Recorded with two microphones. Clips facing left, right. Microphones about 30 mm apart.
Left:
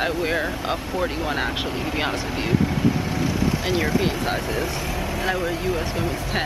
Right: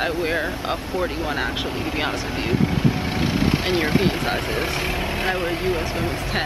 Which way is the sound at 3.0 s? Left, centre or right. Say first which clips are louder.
Right 2 dB; right.